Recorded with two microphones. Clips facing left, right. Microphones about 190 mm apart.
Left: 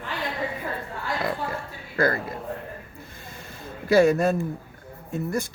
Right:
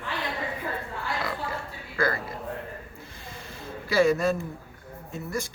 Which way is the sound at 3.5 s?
55° left (ahead or behind).